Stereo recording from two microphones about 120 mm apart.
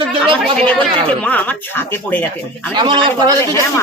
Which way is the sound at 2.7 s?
45° right (ahead or behind).